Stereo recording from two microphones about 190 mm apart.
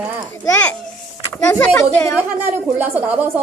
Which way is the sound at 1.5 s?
10° left (ahead or behind).